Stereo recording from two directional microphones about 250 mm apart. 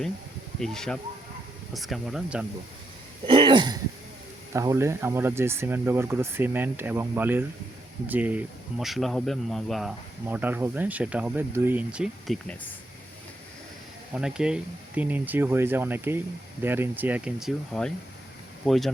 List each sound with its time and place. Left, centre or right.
0.6 s speech: centre
3.2 s a sound: centre
4.5 s speech: centre
14.1 s speech: centre